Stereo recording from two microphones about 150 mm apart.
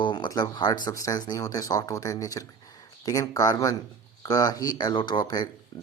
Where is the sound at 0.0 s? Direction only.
30° left (ahead or behind).